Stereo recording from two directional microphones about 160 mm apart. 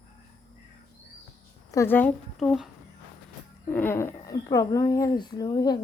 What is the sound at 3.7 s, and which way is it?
A woman's voice, 15° left (ahead or behind).